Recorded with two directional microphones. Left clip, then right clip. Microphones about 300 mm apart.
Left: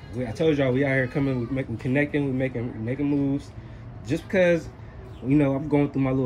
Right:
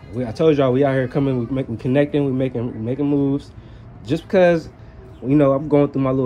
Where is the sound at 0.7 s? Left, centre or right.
Right.